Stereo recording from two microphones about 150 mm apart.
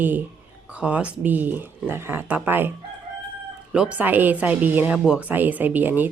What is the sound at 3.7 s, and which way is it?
Speech, 5° right (ahead or behind).